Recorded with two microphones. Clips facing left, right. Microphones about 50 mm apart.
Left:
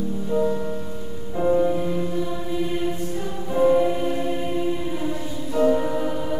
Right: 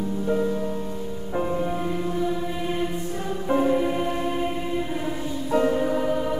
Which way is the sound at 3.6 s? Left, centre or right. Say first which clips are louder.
Left 9 dB; centre.